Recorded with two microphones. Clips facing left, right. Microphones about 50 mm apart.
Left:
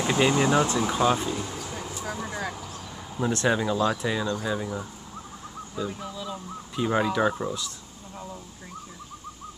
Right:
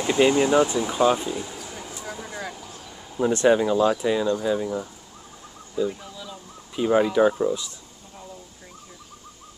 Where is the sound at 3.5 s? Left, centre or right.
Centre.